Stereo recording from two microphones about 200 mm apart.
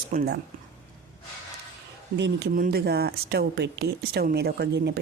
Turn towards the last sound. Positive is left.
turn(degrees=-55)  # may be behind; listen again after turning